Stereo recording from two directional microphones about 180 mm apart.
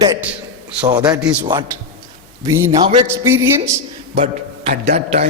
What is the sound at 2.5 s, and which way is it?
Speech, 15° right (ahead or behind).